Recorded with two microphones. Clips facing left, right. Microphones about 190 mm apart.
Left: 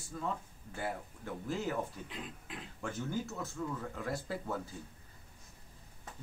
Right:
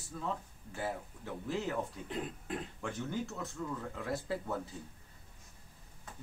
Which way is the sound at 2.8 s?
Centre (ahead or behind).